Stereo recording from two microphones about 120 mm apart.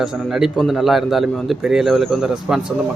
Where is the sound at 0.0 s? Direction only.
5° right (ahead or behind).